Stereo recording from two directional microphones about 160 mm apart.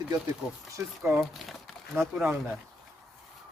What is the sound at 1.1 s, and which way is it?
Speech, centre (ahead or behind).